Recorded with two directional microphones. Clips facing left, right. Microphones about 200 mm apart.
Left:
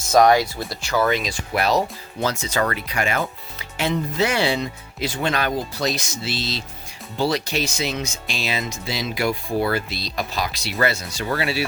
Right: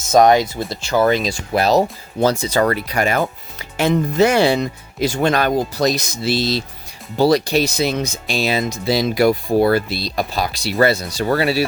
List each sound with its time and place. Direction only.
0.1 s speech: 20° right (ahead or behind); by 11.6 s 40° right (ahead or behind)